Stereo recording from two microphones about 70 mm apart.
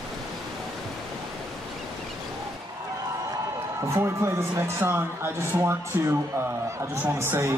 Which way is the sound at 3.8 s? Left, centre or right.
Right.